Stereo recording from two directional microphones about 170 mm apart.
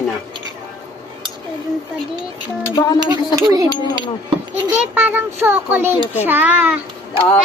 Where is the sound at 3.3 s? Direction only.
20° right (ahead or behind).